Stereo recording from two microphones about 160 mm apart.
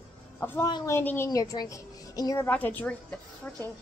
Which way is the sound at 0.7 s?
25° left (ahead or behind).